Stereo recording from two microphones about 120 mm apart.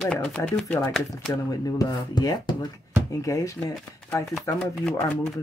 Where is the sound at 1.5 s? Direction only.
30° left (ahead or behind).